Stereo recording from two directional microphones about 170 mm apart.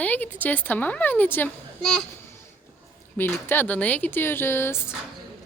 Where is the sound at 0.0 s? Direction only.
10° left (ahead or behind).